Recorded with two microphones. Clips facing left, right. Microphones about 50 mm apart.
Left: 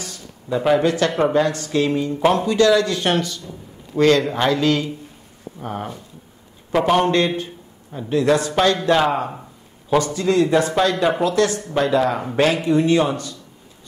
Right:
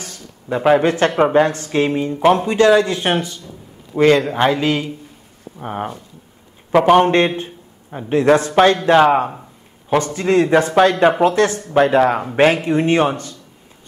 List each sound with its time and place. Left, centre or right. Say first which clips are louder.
0.0 s speech: even; right; by 4.8 s centre
5.6 s a man's voice: right 3 dB; right